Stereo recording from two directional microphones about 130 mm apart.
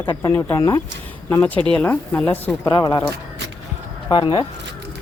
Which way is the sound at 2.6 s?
35° left (ahead or behind).